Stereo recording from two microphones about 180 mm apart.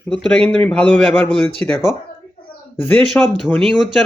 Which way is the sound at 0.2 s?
10° left (ahead or behind).